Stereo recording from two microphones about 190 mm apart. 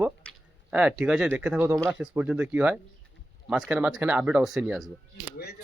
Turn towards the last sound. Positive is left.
turn(degrees=-5)  # may be behind; listen again after turning